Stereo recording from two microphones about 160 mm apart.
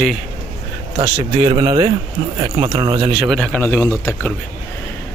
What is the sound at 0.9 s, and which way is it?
Speech, 35° right (ahead or behind).